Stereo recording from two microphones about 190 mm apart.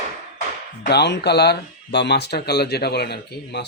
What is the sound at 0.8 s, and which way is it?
Speech, 60° left (ahead or behind).